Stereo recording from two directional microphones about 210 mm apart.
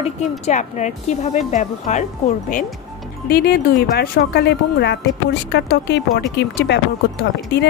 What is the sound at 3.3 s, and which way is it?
Speech, 50° left (ahead or behind).